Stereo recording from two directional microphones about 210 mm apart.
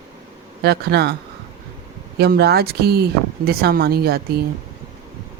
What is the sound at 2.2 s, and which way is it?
Speech, 50° right (ahead or behind).